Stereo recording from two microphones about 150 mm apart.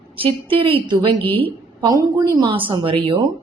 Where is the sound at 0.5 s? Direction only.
35° right (ahead or behind).